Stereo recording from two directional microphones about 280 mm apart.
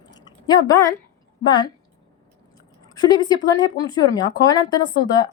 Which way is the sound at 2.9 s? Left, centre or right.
Centre.